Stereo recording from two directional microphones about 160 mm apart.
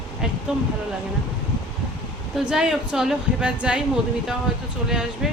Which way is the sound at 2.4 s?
5° right (ahead or behind).